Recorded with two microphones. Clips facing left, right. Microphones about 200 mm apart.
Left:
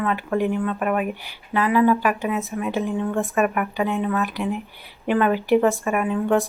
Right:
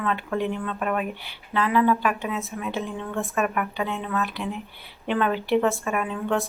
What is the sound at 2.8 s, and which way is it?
Speech, 15° left (ahead or behind).